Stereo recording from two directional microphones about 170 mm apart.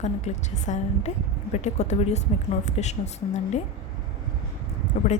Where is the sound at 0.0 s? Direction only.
40° left (ahead or behind).